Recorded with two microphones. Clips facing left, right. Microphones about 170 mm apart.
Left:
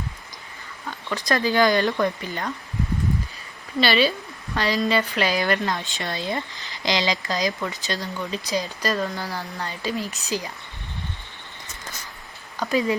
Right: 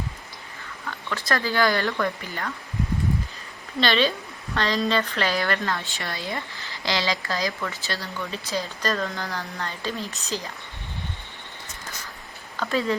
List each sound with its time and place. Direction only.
0.9 s speech: 15° left (ahead or behind)
3.8 s a woman's voice: 10° left (ahead or behind)
12.6 s a woman's voice: 15° left (ahead or behind)